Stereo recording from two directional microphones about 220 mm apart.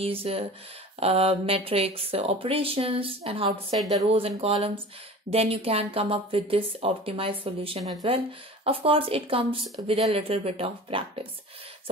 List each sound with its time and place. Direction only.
0.0 s speech: 25° right (ahead or behind)
3.4 s a woman's voice: centre (ahead or behind)
4.0 s speech: 25° right (ahead or behind)